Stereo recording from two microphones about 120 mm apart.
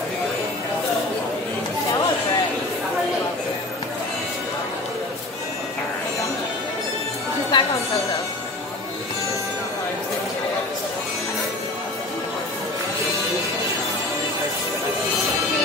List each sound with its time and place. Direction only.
7.5 s chatter: 40° left (ahead or behind)